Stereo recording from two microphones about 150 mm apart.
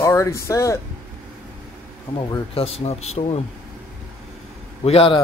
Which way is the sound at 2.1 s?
35° left (ahead or behind).